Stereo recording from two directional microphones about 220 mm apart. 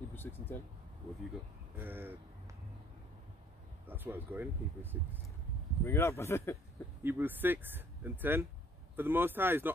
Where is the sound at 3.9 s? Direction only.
10° right (ahead or behind).